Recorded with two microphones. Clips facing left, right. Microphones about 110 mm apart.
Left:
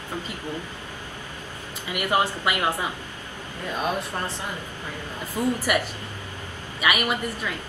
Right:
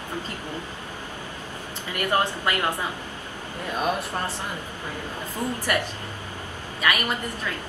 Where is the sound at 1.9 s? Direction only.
10° left (ahead or behind).